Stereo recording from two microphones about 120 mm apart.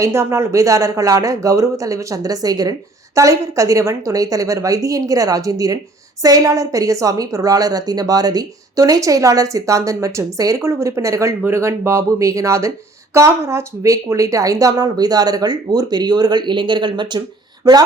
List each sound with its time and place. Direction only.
0.0 s a woman's voice: 20° right (ahead or behind)